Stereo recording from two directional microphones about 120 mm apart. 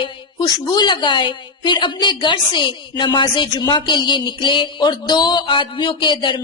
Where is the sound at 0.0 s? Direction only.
35° left (ahead or behind).